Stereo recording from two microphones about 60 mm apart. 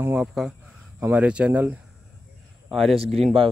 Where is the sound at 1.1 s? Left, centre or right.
Right.